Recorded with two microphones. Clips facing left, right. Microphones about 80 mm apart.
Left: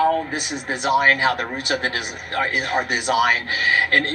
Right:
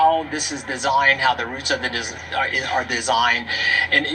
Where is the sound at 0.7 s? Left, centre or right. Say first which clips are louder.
Even; left.